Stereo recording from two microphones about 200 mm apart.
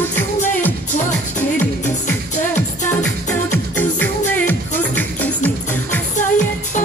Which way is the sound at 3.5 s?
10° left (ahead or behind).